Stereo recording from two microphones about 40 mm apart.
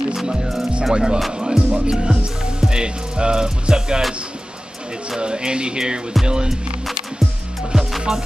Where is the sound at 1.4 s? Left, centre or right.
Right.